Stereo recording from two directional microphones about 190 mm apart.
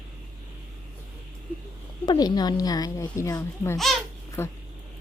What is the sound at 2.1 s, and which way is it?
A child's voice, 20° left (ahead or behind).